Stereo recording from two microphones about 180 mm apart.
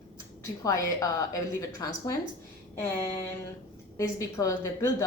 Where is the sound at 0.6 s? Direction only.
20° left (ahead or behind).